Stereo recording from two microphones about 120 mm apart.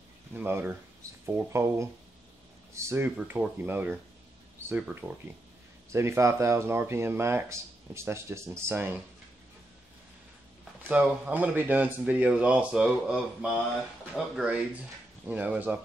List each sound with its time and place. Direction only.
0.3 s speech: 15° right (ahead or behind)
10.8 s speech: 10° right (ahead or behind)